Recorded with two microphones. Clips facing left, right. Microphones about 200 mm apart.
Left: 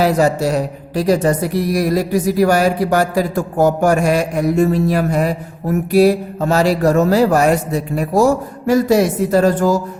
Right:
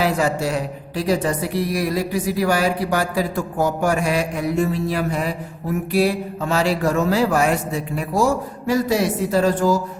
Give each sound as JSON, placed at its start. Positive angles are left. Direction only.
{"t": 0.0, "sound": "speech", "side_deg": 40}